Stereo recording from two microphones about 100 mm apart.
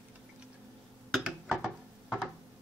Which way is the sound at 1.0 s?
5° right (ahead or behind).